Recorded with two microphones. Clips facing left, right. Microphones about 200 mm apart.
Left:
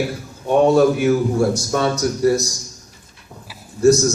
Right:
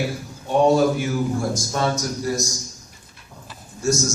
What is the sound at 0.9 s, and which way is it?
A man's voice, 65° left (ahead or behind).